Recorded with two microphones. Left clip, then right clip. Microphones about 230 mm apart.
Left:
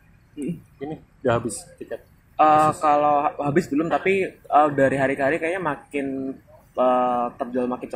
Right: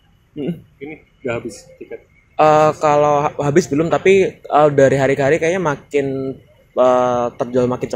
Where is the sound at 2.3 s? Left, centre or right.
Right.